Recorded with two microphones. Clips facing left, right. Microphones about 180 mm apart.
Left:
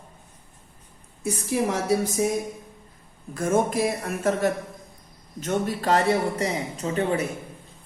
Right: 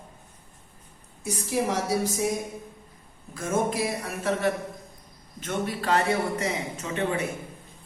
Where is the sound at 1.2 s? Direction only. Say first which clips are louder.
Left 2 dB; 55° left (ahead or behind).